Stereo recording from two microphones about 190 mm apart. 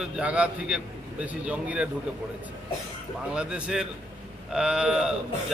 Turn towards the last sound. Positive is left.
turn(degrees=-5)  # may be behind; listen again after turning